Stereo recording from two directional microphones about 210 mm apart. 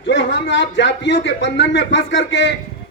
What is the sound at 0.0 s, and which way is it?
A man's voice, 60° left (ahead or behind).